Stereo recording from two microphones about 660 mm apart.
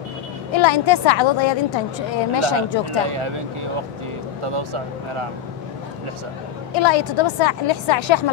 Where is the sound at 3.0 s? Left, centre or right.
Right.